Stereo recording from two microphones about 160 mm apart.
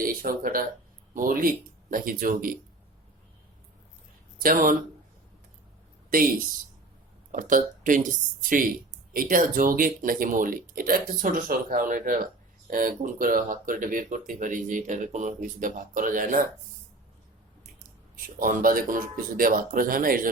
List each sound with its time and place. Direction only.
0.0 s speech: 65° right (ahead or behind)
4.4 s speech: 60° right (ahead or behind)
6.1 s speech: 60° right (ahead or behind)
18.3 s speech: 60° right (ahead or behind)